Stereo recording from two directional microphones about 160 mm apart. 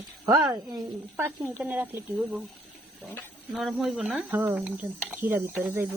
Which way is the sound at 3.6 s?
Centre (ahead or behind).